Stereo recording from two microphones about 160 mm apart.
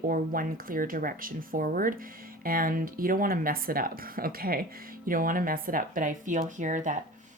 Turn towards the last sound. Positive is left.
turn(degrees=-50)  # may be behind; listen again after turning